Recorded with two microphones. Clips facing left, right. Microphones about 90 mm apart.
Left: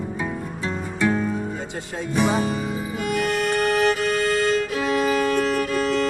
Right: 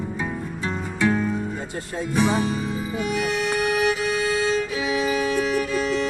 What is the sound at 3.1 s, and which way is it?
Music, 50° left (ahead or behind).